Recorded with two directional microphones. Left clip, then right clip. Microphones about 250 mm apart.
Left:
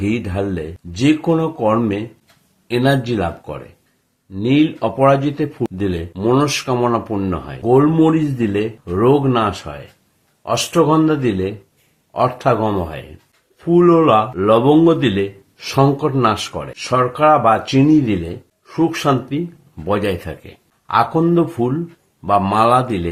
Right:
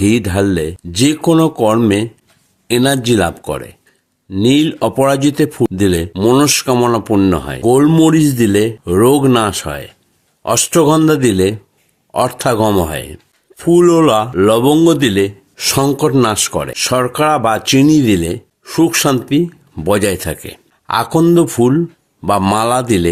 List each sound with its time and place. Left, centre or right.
0.0 s speech: right